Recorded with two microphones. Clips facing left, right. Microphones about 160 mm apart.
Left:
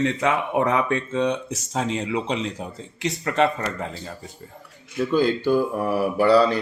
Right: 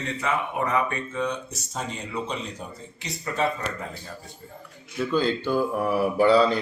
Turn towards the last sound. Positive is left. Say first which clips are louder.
# left 1 dB
turn(degrees=10)  # may be behind; listen again after turning